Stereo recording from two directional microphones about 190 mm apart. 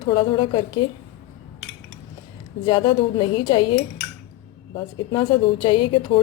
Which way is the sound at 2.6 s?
25° left (ahead or behind).